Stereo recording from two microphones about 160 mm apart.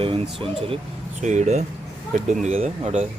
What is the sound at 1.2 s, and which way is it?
Speech, 50° right (ahead or behind).